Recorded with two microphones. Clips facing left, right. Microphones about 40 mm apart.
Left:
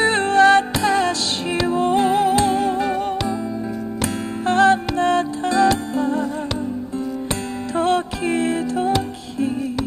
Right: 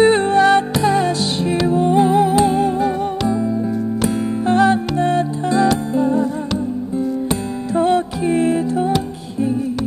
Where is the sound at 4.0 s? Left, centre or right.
Centre.